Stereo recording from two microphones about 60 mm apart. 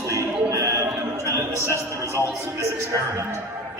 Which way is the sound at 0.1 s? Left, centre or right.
Right.